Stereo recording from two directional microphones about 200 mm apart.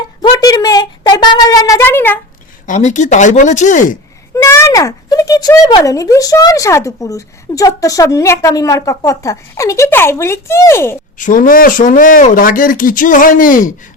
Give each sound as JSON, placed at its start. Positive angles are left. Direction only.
{"t": 0.2, "sound": "a sound", "side_deg": 20}
{"t": 2.6, "sound": "speech", "side_deg": 35}
{"t": 4.4, "sound": "speech", "side_deg": 15}
{"t": 11.2, "sound": "speech", "side_deg": 40}